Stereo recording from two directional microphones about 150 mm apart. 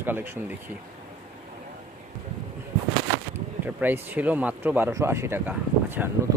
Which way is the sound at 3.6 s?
10° right (ahead or behind).